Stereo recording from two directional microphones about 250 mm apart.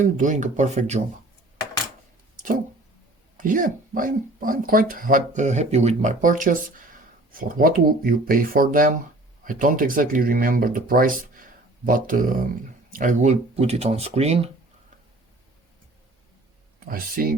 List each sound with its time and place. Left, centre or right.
0.0 s speech: right
2.3 s a sound: right
3.3 s speech: right
16.9 s speech: right